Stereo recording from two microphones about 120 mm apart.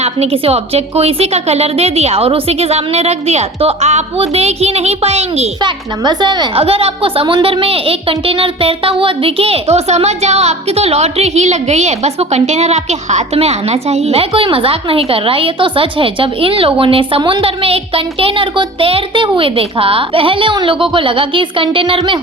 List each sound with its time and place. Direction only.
0.0 s a woman's voice: 55° right (ahead or behind)
5.6 s a woman's voice: 35° right (ahead or behind)
6.6 s speech: 55° right (ahead or behind)